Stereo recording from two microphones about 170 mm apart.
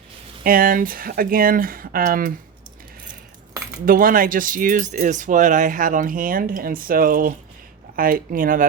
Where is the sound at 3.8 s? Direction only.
55° right (ahead or behind).